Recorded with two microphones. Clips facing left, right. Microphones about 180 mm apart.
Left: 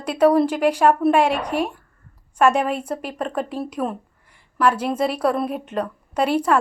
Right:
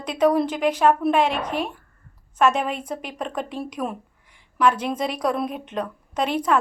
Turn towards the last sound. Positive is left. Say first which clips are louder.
# left 3 dB
turn(degrees=10)  # may be behind; listen again after turning